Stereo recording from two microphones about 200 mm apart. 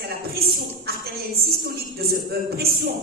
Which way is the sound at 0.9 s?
50° right (ahead or behind).